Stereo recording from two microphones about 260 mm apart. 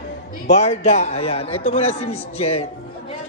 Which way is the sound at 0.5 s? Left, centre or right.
Left.